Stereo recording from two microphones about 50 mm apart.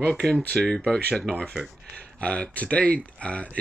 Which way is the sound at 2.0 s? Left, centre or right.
Left.